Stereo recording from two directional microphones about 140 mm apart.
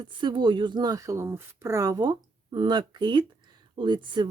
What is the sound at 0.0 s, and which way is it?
Speech, 35° right (ahead or behind).